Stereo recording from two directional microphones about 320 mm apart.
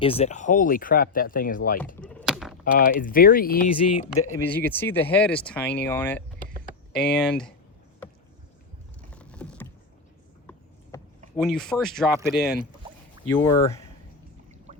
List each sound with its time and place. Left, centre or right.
0.0 s speech: centre
2.0 s a sound: centre
2.6 s speech: left
4.4 s speech: centre
8.0 s a sound: centre
9.0 s vehicle: centre
11.3 s speech: centre